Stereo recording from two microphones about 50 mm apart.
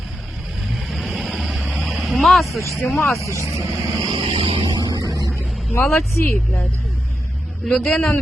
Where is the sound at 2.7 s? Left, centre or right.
Centre.